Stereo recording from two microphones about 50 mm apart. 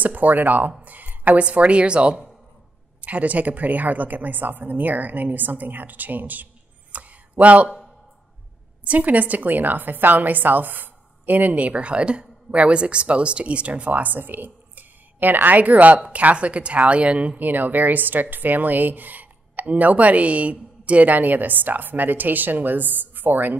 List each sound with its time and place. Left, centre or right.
0.0 s a woman's voice: right
8.8 s a woman's voice: right
17.4 s a woman's voice: right